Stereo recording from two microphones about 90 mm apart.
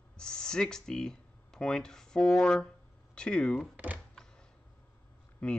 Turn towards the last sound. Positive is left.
turn(degrees=10)  # may be behind; listen again after turning